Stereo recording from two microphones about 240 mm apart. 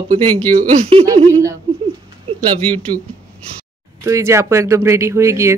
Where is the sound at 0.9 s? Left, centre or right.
Right.